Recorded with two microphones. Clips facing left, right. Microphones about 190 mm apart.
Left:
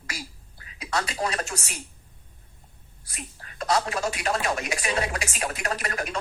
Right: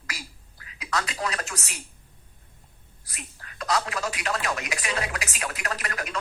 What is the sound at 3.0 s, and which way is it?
Speech, 25° left (ahead or behind).